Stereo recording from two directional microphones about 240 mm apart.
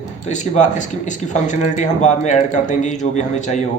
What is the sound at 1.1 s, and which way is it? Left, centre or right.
A man's voice, left.